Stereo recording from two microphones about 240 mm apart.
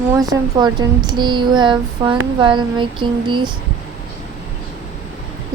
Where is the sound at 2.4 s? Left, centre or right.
Centre.